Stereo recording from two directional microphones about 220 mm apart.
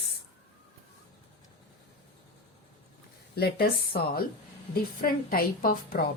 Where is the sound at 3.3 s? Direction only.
45° left (ahead or behind).